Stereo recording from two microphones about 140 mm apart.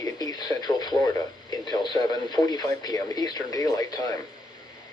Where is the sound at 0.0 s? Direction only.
25° left (ahead or behind).